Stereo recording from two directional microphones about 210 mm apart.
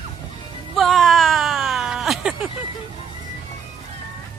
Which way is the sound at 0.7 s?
Centre (ahead or behind).